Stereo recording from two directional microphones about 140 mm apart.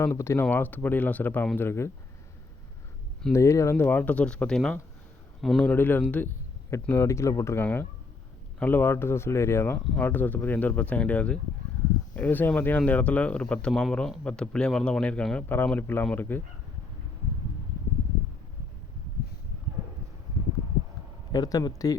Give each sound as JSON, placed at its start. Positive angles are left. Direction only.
{"t": 0.0, "sound": "speech", "side_deg": 20}
{"t": 3.3, "sound": "speech", "side_deg": 20}
{"t": 21.3, "sound": "speech", "side_deg": 30}